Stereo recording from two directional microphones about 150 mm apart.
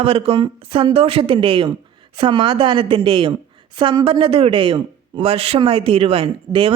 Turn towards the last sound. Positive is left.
turn(degrees=-35)  # may be behind; listen again after turning